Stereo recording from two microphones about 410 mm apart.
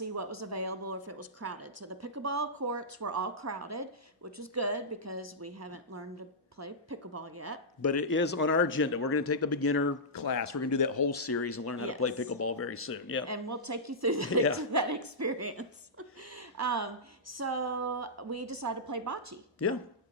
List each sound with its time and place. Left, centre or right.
0.0 s a woman's voice: right
7.8 s speech: left
10.2 s speech: left
13.2 s a woman's voice: right